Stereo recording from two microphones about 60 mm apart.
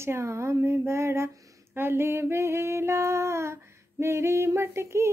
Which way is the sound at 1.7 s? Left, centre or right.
Right.